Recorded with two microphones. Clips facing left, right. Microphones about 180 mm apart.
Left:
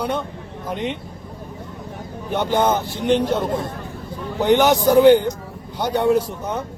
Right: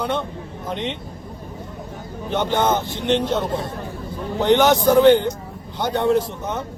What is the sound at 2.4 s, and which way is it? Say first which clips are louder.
Speech: left 1 dB; 10° left (ahead or behind).